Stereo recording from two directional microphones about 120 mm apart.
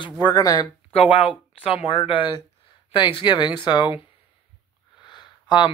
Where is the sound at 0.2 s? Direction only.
30° left (ahead or behind).